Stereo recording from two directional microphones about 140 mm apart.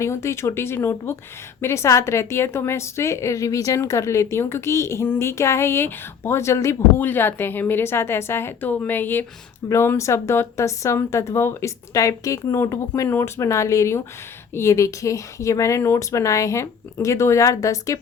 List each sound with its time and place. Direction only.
0.0 s a woman's voice: 20° left (ahead or behind)